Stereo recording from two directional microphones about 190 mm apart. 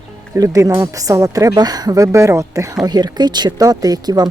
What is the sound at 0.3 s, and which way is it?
Speech, 15° right (ahead or behind).